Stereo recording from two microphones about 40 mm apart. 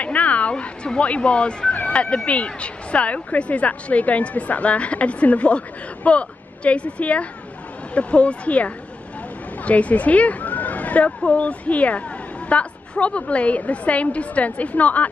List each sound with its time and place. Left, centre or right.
0.0 s a woman's voice: left
11.1 s speech: left